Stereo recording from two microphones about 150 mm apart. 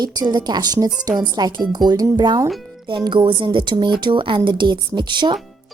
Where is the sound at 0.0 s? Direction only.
30° right (ahead or behind).